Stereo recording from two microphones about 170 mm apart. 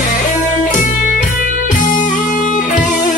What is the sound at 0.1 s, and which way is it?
Music, 45° left (ahead or behind).